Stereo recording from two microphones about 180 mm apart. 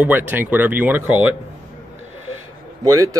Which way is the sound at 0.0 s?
10° right (ahead or behind).